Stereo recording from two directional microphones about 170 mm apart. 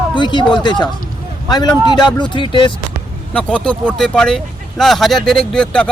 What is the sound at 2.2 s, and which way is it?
Speech, 25° left (ahead or behind).